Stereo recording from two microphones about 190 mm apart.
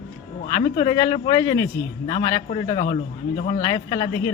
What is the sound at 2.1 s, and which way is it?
A man's voice, 35° left (ahead or behind).